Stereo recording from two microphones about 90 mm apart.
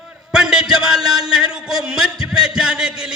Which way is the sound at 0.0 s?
5° right (ahead or behind).